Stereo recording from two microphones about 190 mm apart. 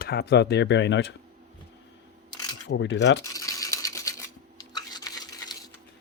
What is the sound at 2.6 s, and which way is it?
Speech, 75° left (ahead or behind).